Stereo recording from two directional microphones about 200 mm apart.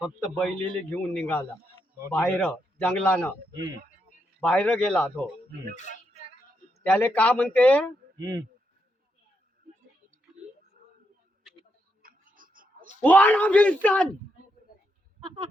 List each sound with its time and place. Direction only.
0.0 s a man's voice: centre (ahead or behind)
3.5 s speech: 20° right (ahead or behind)
4.4 s a man's voice: 5° left (ahead or behind)
6.8 s a man's voice: 5° left (ahead or behind)
8.2 s speech: 15° right (ahead or behind)
12.0 s a sound: 45° right (ahead or behind)
13.0 s a man's voice: 10° left (ahead or behind)